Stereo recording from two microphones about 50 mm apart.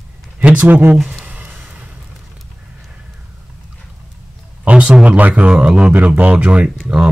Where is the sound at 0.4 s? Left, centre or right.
Right.